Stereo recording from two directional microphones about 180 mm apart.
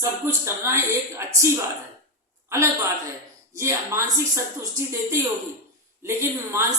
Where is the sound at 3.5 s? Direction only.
15° right (ahead or behind).